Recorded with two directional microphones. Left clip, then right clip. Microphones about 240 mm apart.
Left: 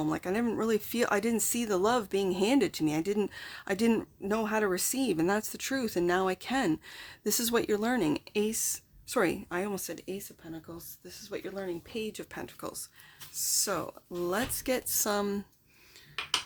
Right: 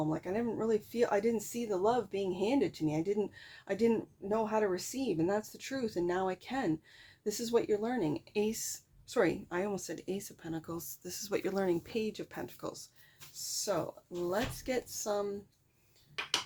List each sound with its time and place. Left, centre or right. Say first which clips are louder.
0.0 s speech: left 3 dB; left; by 10.2 s centre
10.4 s speech: right 3 dB; centre
11.9 s speech: even; centre
13.3 s speech: left 3 dB; left